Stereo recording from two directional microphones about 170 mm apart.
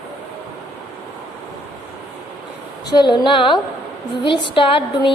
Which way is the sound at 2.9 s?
25° left (ahead or behind).